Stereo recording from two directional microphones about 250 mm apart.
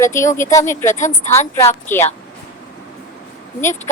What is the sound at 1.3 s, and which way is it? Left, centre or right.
Speech, centre.